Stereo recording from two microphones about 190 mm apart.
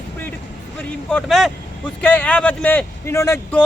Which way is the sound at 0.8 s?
5° left (ahead or behind).